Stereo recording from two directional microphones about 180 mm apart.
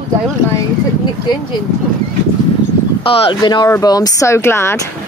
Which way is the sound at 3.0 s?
30° left (ahead or behind).